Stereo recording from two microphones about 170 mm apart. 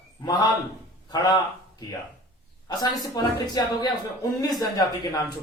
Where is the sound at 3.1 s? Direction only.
20° left (ahead or behind).